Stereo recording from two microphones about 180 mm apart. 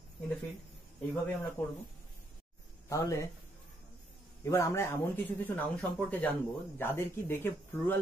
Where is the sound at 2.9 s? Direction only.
15° left (ahead or behind).